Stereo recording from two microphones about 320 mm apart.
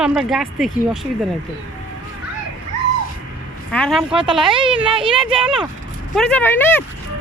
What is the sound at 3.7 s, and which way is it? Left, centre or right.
Speech, centre.